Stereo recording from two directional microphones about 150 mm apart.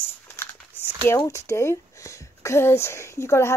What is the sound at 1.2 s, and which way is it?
Speech, 20° left (ahead or behind).